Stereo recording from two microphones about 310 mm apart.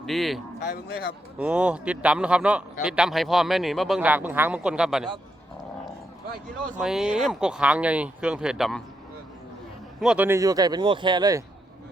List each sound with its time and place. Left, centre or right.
0.0 s speech: centre
0.6 s speech: left
1.4 s speech: centre
6.7 s speech: centre
10.0 s speech: centre